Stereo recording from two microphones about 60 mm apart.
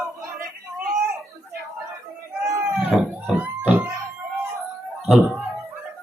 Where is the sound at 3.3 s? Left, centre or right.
Right.